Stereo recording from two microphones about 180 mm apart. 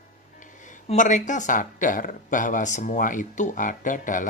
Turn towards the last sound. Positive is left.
turn(degrees=45)  # may be behind; listen again after turning